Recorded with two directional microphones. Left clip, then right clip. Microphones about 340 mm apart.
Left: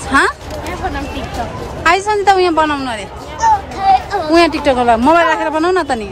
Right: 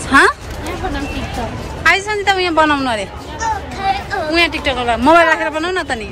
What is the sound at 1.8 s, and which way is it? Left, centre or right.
Speech, centre.